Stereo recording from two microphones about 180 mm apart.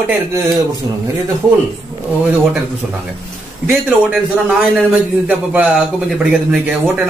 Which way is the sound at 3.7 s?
10° right (ahead or behind).